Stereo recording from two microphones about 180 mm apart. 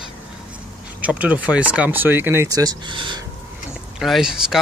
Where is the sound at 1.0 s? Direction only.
10° right (ahead or behind); by 3.2 s 25° right (ahead or behind).